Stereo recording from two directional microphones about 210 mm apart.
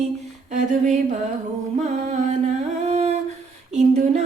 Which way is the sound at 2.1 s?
35° right (ahead or behind).